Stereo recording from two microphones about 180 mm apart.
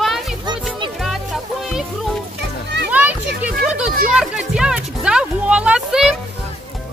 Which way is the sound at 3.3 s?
5° right (ahead or behind).